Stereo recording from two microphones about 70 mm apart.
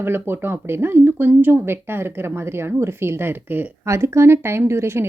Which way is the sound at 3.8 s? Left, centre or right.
Right.